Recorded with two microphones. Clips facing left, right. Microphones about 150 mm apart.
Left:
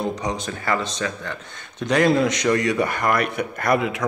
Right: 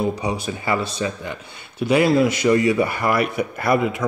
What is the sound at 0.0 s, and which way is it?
Speech, 10° right (ahead or behind).